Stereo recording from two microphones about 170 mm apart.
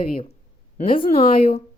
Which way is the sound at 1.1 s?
35° left (ahead or behind).